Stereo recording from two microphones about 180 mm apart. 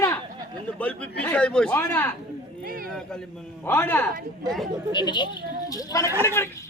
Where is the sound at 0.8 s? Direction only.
10° left (ahead or behind).